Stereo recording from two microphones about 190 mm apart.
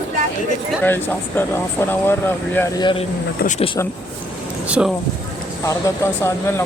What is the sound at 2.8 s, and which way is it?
Speech, 25° left (ahead or behind).